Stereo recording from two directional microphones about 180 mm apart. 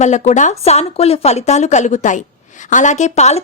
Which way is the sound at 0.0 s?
40° left (ahead or behind).